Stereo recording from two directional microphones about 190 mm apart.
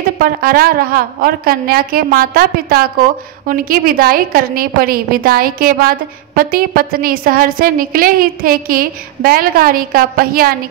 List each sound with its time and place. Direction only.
0.2 s a woman's voice: 50° right (ahead or behind)